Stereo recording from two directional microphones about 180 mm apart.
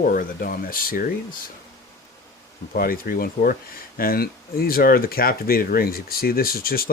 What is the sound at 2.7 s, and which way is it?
Speech, 55° left (ahead or behind).